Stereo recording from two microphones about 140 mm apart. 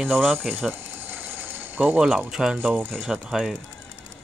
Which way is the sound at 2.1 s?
5° right (ahead or behind).